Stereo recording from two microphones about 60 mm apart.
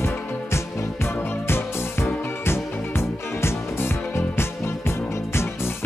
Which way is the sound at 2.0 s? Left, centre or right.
Left.